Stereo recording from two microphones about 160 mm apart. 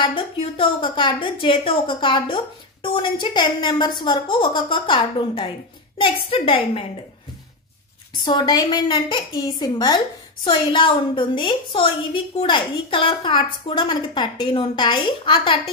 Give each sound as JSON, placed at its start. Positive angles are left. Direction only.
{"t": 0.0, "sound": "a woman's voice", "side_deg": 30}
{"t": 8.1, "sound": "a woman's voice", "side_deg": 25}